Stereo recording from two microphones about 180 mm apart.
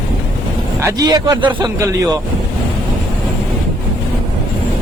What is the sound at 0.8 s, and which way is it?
A man's voice, 20° right (ahead or behind).